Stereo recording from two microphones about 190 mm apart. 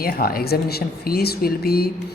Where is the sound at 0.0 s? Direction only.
50° left (ahead or behind).